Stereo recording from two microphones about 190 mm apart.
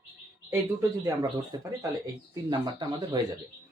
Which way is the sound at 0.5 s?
15° right (ahead or behind).